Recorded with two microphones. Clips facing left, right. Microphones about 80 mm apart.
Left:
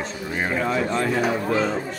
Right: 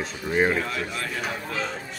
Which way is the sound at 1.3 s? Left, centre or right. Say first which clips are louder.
Left 8 dB; left.